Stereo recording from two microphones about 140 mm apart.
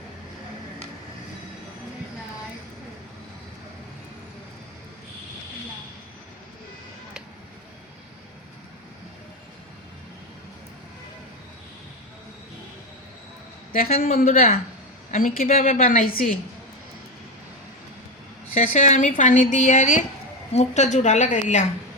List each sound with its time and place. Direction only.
13.7 s a man's voice: 90° left
15.1 s a woman's voice: 75° left (ahead or behind)
18.5 s a woman's voice: 60° left (ahead or behind)